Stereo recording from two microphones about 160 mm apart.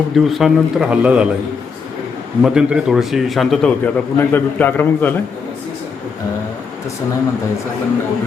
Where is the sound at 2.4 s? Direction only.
5° right (ahead or behind); by 5.1 s 10° left (ahead or behind).